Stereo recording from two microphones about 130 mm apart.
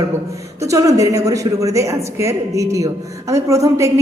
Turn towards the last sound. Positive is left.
turn(degrees=-25)  # may be behind; listen again after turning